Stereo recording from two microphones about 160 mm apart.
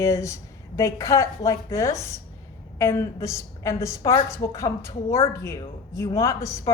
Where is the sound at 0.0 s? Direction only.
20° left (ahead or behind).